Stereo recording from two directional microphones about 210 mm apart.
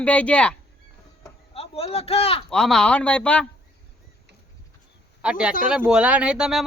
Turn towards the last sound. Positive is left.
turn(degrees=0)  # may be behind; listen again after turning